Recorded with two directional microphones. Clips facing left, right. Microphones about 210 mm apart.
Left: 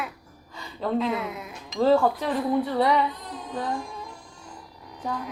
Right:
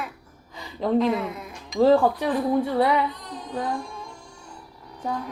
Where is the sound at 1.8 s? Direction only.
15° right (ahead or behind).